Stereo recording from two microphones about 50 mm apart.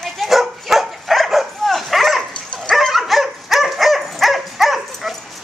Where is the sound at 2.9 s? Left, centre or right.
Centre.